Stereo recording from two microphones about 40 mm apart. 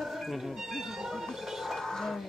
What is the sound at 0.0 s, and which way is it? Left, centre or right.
Speech, centre.